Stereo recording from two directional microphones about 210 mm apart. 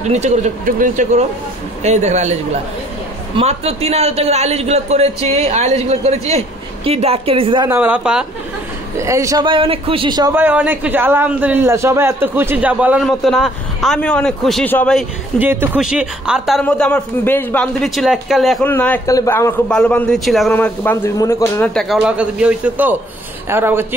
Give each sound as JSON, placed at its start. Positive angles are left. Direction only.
{"t": 0.1, "sound": "a man's voice", "side_deg": -35}
{"t": 3.3, "sound": "a man's voice", "side_deg": -30}
{"t": 7.7, "sound": "speech", "side_deg": -10}
{"t": 8.9, "sound": "a man's voice", "side_deg": -15}
{"t": 15.3, "sound": "a man's voice", "side_deg": -10}
{"t": 21.8, "sound": "a man's voice", "side_deg": -5}